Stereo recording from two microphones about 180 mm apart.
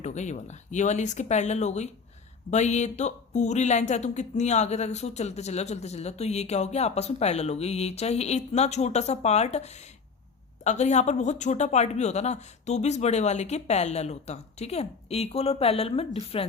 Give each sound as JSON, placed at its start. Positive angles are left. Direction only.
{"t": 0.0, "sound": "speech", "side_deg": 40}